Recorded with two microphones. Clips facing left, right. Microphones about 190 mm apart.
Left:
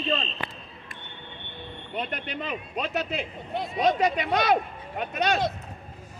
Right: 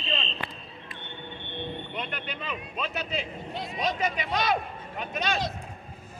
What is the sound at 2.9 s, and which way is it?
Speech, 55° left (ahead or behind).